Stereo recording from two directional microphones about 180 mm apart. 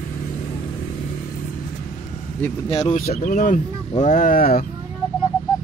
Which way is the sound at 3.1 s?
40° left (ahead or behind).